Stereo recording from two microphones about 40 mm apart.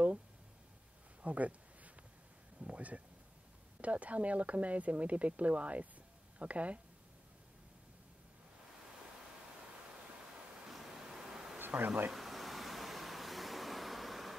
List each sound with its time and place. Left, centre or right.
1.2 s speech: right
2.6 s speech: right
10.7 s waves: centre
11.5 s insect: right
12.1 s a sound: centre